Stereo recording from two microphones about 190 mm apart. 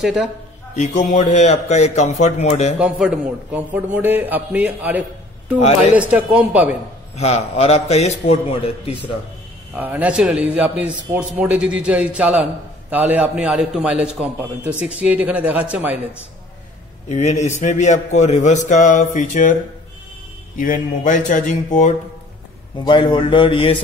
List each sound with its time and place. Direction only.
0.0 s a man's voice: centre (ahead or behind)
0.7 s a man's voice: 40° left (ahead or behind)
2.8 s a man's voice: 5° right (ahead or behind)
7.2 s a man's voice: 35° left (ahead or behind)
9.8 s a man's voice: 10° right (ahead or behind)
17.1 s a man's voice: 35° left (ahead or behind)
20.5 s a man's voice: 45° left (ahead or behind)
22.8 s a man's voice: 25° left (ahead or behind)